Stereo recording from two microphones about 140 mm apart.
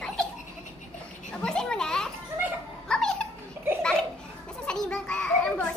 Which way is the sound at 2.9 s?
5° left (ahead or behind).